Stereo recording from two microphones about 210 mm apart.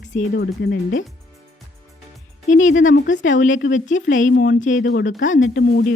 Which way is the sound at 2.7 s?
65° left (ahead or behind).